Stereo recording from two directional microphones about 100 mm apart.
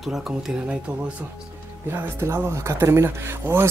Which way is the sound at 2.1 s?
25° right (ahead or behind).